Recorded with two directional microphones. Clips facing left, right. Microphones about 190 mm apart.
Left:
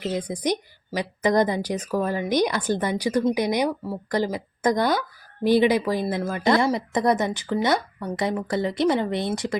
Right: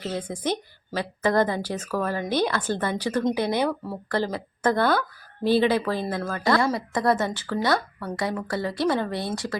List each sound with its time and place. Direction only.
0.0 s speech: 15° left (ahead or behind)